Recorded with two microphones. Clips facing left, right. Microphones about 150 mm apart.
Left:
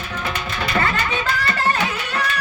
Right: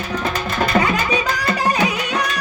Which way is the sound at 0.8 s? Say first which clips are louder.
Right 3 dB; 15° right (ahead or behind).